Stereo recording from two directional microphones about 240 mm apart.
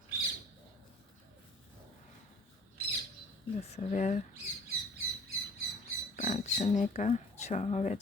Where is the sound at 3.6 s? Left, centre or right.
Left.